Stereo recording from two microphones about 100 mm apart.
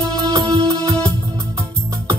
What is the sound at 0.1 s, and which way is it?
Music, 45° right (ahead or behind).